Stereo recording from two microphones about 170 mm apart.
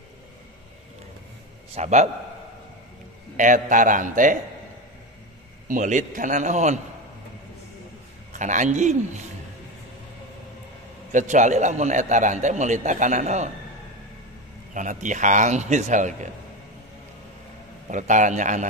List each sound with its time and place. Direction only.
1.7 s a man's voice: 40° right (ahead or behind)
3.3 s a man's voice: 50° right (ahead or behind)
5.7 s a man's voice: 50° right (ahead or behind)
8.3 s a man's voice: 45° right (ahead or behind)
11.1 s a man's voice: 45° right (ahead or behind)
14.7 s a man's voice: 50° right (ahead or behind)
17.8 s a man's voice: 45° right (ahead or behind)